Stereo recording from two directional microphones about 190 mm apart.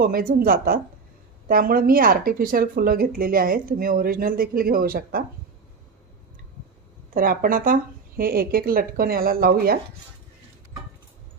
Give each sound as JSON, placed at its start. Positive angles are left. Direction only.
{"t": 0.0, "sound": "speech", "side_deg": -50}
{"t": 7.1, "sound": "speech", "side_deg": -45}